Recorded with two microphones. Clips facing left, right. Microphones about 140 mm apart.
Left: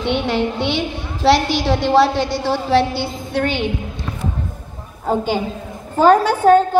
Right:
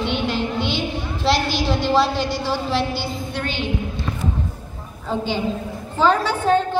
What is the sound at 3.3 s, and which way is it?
Speech, 55° left (ahead or behind).